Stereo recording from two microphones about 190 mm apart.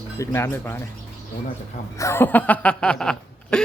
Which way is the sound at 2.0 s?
15° left (ahead or behind).